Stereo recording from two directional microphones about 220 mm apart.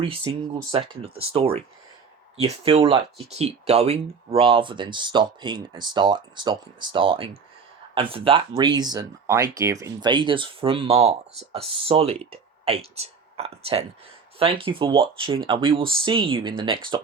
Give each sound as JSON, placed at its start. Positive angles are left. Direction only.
{"t": 0.0, "sound": "speech", "side_deg": -25}